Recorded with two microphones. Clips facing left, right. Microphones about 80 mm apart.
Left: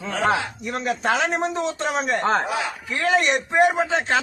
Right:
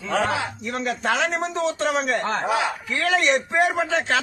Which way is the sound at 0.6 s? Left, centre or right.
Centre.